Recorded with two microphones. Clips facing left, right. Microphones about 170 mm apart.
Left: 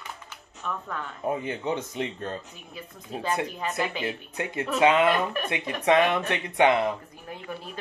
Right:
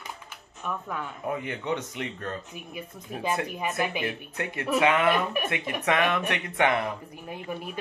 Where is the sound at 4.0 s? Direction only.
25° left (ahead or behind).